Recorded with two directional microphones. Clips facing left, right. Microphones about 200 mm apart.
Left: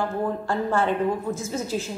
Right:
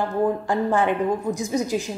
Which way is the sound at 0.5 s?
15° right (ahead or behind).